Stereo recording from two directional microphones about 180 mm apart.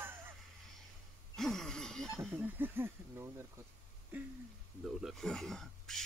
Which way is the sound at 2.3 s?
10° right (ahead or behind).